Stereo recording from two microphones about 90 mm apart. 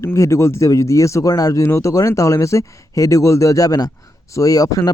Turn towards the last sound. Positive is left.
turn(degrees=40)  # may be behind; listen again after turning